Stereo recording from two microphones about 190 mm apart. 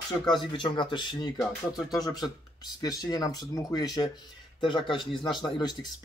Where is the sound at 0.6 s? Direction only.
25° left (ahead or behind).